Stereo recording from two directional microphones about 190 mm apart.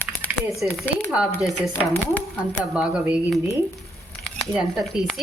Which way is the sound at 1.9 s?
10° left (ahead or behind).